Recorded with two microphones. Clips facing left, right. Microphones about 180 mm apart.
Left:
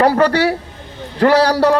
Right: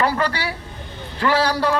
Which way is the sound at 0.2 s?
70° left (ahead or behind).